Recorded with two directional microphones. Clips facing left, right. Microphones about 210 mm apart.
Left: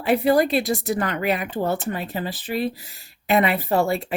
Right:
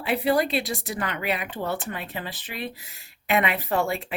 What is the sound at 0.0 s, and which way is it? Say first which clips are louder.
Speech: left 5 dB; 45° left (ahead or behind).